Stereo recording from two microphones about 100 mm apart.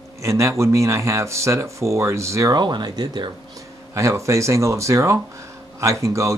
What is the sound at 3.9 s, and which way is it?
Speech, 30° right (ahead or behind).